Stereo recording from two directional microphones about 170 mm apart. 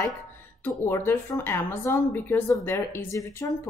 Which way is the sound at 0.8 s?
15° left (ahead or behind).